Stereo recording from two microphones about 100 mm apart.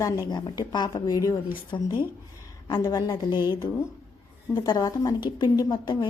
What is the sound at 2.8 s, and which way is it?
Speech, 40° left (ahead or behind).